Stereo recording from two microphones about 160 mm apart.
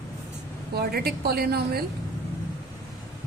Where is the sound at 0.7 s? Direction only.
75° right (ahead or behind).